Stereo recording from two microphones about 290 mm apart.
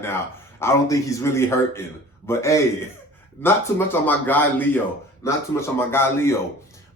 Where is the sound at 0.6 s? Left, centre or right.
Centre.